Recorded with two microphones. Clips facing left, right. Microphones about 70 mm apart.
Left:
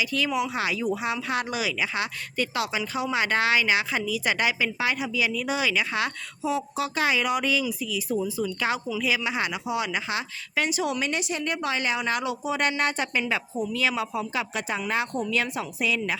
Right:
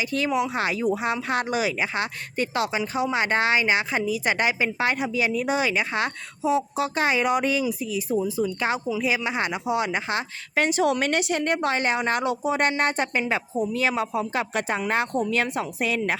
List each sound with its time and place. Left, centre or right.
0.0 s speech: right